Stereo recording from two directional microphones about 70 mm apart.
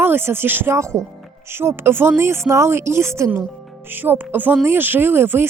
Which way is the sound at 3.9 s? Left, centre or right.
Right.